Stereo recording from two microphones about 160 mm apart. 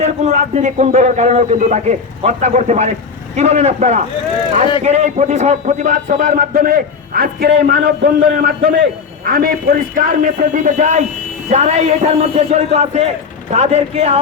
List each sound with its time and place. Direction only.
0.0 s a man's voice: 45° right (ahead or behind)